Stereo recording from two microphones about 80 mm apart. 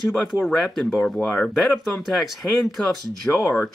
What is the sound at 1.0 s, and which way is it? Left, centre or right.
Speech, centre.